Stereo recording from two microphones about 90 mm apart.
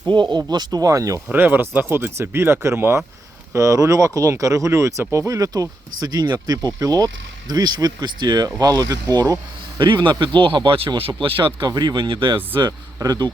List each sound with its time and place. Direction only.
0.1 s speech: 60° right (ahead or behind); by 1.2 s 35° right (ahead or behind)
1.3 s speech: 20° right (ahead or behind); by 9.8 s 45° right (ahead or behind)
9.8 s speech: 65° right (ahead or behind); by 11.1 s 90° right
11.2 s speech: 75° right (ahead or behind)
11.7 s speech: 50° right (ahead or behind)
11.9 s speech: 70° right (ahead or behind)
13.0 s speech: 45° right (ahead or behind)